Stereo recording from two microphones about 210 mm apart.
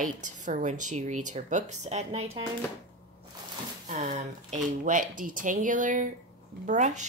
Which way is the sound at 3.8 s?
35° right (ahead or behind).